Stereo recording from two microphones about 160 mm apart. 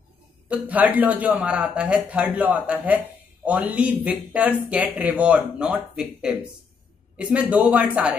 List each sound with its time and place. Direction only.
0.5 s speech: 10° right (ahead or behind)